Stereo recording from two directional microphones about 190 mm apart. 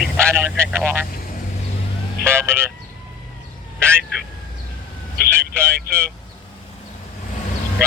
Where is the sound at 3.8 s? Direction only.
15° right (ahead or behind).